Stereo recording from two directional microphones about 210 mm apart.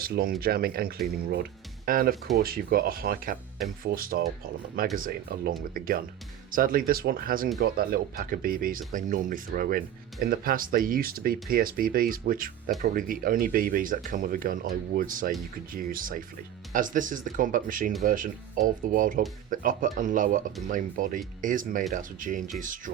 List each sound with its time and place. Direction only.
0.0 s speech: 45° right (ahead or behind)